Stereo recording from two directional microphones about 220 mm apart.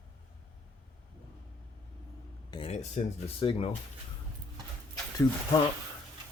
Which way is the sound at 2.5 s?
25° left (ahead or behind).